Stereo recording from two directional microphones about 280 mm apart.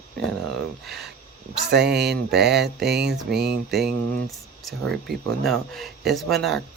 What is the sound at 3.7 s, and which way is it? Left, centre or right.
Speech, centre.